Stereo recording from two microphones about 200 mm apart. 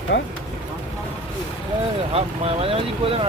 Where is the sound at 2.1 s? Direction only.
30° right (ahead or behind).